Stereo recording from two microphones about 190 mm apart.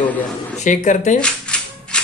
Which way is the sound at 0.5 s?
40° left (ahead or behind).